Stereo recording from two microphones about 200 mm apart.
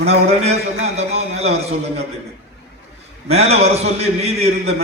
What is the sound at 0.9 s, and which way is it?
Speech, 30° right (ahead or behind).